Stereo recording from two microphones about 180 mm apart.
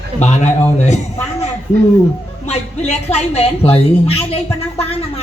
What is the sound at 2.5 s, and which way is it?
Speech, 40° left (ahead or behind).